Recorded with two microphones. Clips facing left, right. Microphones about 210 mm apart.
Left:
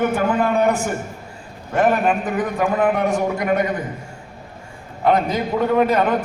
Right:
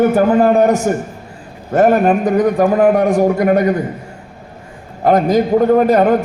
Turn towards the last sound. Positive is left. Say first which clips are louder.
# right 6 dB
turn(degrees=-40)  # may be behind; listen again after turning